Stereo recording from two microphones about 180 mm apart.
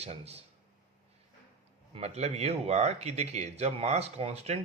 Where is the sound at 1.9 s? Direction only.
35° right (ahead or behind).